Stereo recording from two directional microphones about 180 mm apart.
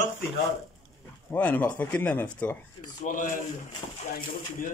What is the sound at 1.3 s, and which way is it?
Speech, 10° left (ahead or behind).